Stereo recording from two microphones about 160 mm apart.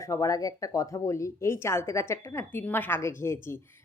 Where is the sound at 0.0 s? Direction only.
20° left (ahead or behind).